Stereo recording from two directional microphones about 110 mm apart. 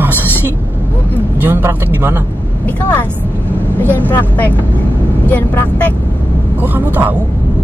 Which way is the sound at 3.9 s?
15° left (ahead or behind).